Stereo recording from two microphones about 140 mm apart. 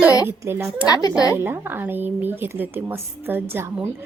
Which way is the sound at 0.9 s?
25° left (ahead or behind).